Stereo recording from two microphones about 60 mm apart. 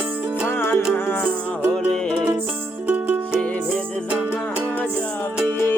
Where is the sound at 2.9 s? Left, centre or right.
Right.